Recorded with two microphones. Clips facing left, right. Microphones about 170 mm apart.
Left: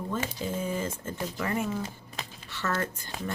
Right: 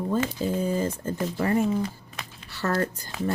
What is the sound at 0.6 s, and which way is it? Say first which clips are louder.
Speech: right 5 dB; 35° right (ahead or behind).